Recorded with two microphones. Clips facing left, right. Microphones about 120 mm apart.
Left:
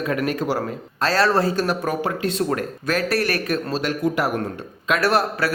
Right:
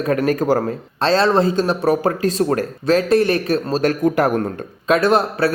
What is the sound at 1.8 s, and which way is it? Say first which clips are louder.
A man's voice: right 6 dB; 40° right (ahead or behind).